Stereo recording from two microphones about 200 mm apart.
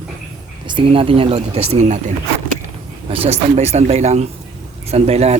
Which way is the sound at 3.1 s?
30° right (ahead or behind).